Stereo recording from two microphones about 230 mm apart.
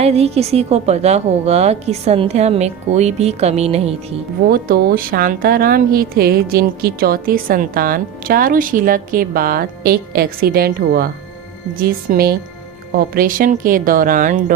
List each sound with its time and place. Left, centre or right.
0.0 s a woman's voice: right
4.4 s a woman's voice: right